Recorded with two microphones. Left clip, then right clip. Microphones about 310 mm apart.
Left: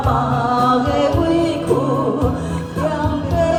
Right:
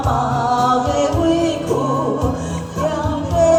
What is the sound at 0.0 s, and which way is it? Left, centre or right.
Music, centre.